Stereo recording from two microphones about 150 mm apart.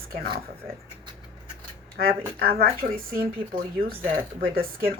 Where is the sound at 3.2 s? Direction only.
75° right (ahead or behind).